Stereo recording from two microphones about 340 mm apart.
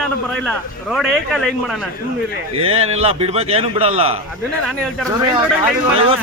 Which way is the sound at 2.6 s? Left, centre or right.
Centre.